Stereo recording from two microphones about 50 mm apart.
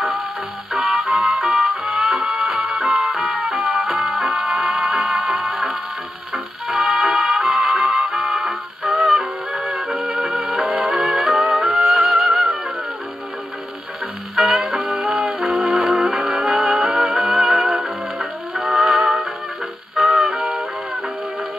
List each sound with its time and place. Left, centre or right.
0.7 s music: centre
14.3 s music: centre
15.7 s music: centre
20.0 s music: centre